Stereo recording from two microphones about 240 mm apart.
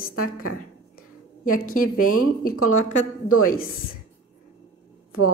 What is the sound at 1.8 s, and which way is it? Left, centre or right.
Speech, left.